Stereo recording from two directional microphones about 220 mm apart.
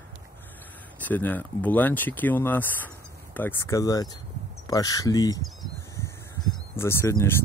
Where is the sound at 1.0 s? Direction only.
10° left (ahead or behind).